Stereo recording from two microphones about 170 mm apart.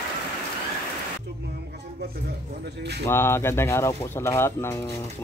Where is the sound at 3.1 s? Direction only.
15° left (ahead or behind).